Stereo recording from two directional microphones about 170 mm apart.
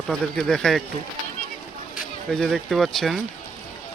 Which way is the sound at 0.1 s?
Centre (ahead or behind).